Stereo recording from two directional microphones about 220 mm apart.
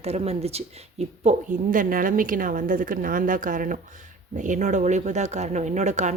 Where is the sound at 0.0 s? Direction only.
30° right (ahead or behind).